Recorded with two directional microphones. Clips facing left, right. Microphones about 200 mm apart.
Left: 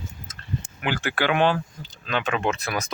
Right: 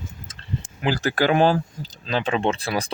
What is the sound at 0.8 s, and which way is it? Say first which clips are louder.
Speech: right 4 dB; 35° right (ahead or behind).